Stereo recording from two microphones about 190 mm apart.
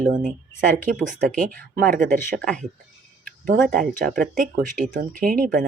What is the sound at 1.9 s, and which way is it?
Speech, 50° right (ahead or behind).